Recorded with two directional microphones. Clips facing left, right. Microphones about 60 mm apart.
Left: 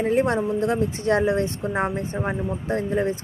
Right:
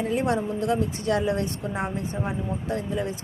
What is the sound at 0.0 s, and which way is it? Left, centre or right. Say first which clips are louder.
Speech: left 4 dB; left.